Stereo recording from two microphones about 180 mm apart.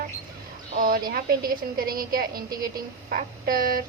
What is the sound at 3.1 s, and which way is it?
Speech, 55° right (ahead or behind).